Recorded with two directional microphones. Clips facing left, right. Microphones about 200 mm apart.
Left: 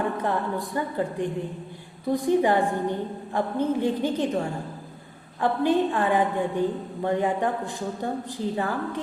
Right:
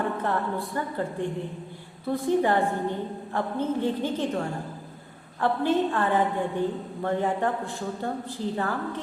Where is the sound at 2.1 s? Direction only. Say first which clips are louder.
Left 2 dB; 15° left (ahead or behind).